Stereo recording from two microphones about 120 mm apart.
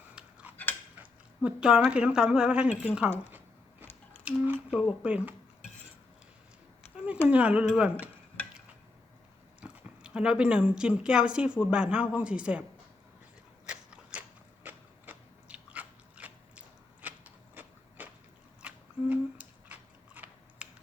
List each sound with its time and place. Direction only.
0.2 s cutlery: 10° right (ahead or behind)
0.5 s cutlery: 15° left (ahead or behind)
0.9 s a sound: 10° right (ahead or behind)
1.9 s speech: 10° right (ahead or behind)
4.2 s speech: 10° right (ahead or behind)
7.3 s speech: 10° right (ahead or behind)
9.6 s speech: 10° right (ahead or behind)
13.7 s biting: 10° right (ahead or behind)
18.6 s a sound: 10° right (ahead or behind)